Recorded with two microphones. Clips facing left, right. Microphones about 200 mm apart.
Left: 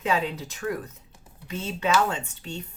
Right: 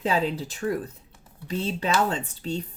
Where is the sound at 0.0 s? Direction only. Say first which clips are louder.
Right 2 dB; 30° right (ahead or behind).